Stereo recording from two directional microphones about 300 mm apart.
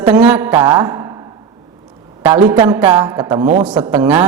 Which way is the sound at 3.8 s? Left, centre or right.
Right.